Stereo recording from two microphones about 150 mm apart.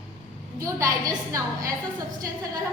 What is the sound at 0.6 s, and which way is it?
A woman's voice, 20° right (ahead or behind).